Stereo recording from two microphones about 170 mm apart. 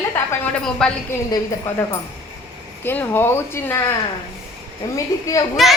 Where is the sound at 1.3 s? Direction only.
20° left (ahead or behind).